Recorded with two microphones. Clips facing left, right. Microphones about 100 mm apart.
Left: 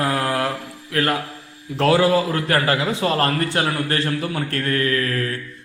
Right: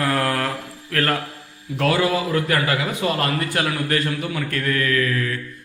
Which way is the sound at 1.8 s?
30° left (ahead or behind).